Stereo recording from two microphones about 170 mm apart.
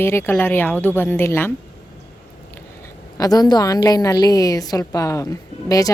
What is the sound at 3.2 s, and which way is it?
A woman's voice, 20° left (ahead or behind).